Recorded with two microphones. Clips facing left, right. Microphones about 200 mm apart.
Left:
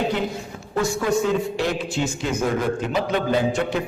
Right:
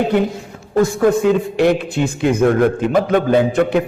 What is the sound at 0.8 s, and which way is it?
A man's voice, 55° right (ahead or behind).